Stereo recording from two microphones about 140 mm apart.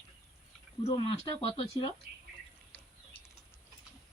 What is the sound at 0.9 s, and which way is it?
Speech, 35° left (ahead or behind).